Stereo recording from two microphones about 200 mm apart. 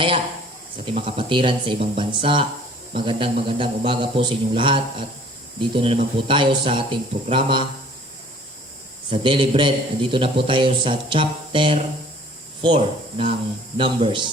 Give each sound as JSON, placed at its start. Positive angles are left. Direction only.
{"t": 0.9, "sound": "a man's voice", "side_deg": -25}
{"t": 9.0, "sound": "a man's voice", "side_deg": -25}